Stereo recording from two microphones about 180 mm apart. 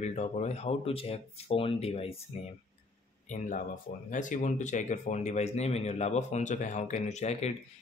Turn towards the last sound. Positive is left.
turn(degrees=35)  # may be behind; listen again after turning